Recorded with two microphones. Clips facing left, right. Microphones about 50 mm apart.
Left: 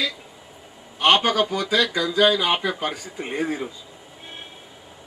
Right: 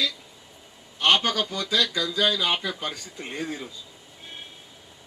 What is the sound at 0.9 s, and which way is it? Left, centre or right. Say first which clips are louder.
Speech: left 4 dB; left.